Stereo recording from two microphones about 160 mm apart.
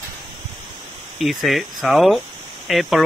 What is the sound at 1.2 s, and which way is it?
Speech, centre (ahead or behind).